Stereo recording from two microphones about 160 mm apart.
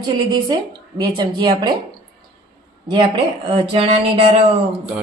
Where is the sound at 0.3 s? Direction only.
25° right (ahead or behind).